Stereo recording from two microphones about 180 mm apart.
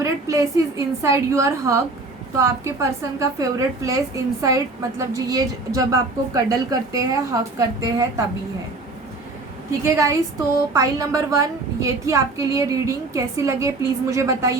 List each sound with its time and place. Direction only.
0.0 s a woman's voice: 15° right (ahead or behind)
9.8 s a woman's voice: 15° right (ahead or behind)